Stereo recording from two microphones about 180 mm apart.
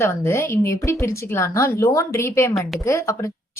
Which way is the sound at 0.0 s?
15° left (ahead or behind).